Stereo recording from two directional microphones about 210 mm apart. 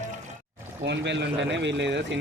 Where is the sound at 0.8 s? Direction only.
55° right (ahead or behind).